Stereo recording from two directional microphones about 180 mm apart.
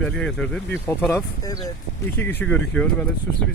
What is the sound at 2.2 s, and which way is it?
Speech, 10° left (ahead or behind).